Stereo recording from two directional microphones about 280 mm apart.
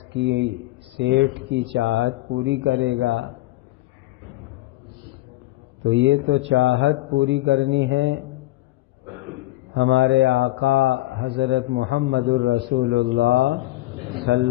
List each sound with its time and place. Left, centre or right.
0.1 s a man's voice: right
5.8 s a man's voice: right
9.7 s speech: right